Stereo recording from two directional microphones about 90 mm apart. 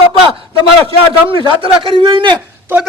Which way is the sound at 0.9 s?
80° right.